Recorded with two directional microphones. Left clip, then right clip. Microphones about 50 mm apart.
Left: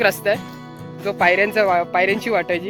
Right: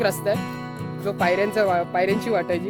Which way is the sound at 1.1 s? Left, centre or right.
Right.